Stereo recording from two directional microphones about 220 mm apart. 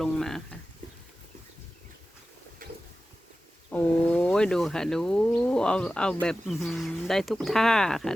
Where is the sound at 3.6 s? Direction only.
5° left (ahead or behind).